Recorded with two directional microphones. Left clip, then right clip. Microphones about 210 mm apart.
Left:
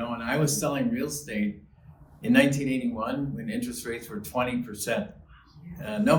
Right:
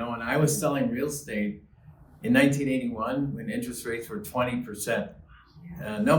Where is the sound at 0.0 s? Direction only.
5° right (ahead or behind).